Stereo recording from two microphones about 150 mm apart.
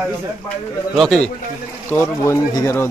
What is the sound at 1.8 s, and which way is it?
Speech, 10° left (ahead or behind).